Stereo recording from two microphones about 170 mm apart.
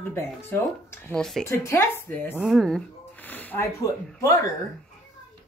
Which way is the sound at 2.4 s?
Centre (ahead or behind).